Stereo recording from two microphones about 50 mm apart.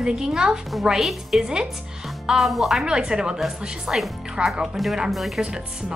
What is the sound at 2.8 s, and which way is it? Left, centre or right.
A woman's voice, centre.